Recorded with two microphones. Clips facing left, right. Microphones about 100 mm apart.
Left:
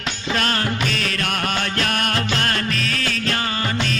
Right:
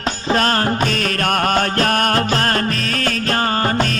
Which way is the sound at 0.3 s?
40° right (ahead or behind).